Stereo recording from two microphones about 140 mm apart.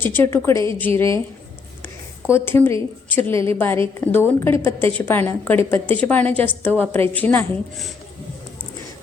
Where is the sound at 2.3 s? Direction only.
15° left (ahead or behind).